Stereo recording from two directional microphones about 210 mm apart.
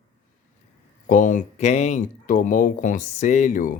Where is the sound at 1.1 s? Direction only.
35° left (ahead or behind).